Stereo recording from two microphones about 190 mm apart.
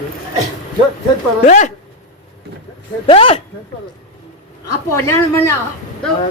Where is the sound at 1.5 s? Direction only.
40° left (ahead or behind).